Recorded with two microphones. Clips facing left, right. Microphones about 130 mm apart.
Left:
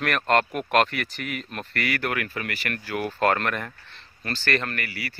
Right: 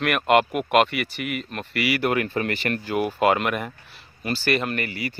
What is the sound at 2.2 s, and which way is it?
Speech, 30° right (ahead or behind).